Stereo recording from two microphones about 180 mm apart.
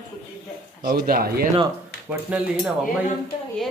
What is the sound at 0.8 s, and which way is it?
Speech, 55° right (ahead or behind).